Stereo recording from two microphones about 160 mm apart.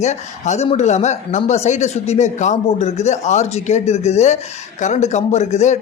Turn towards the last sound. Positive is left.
turn(degrees=45)  # may be behind; listen again after turning